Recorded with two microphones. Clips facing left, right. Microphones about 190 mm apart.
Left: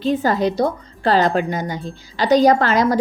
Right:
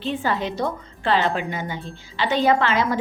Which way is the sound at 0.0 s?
40° left (ahead or behind).